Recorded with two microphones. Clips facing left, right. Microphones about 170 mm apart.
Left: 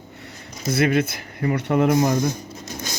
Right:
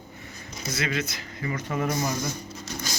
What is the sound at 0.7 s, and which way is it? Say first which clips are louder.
Speech: left 10 dB; 55° left (ahead or behind).